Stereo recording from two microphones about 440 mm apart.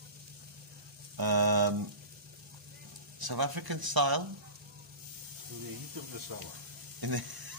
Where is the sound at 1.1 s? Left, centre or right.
Right.